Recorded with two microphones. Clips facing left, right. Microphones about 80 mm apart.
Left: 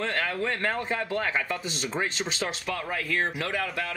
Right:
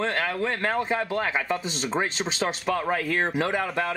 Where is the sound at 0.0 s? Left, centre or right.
Centre.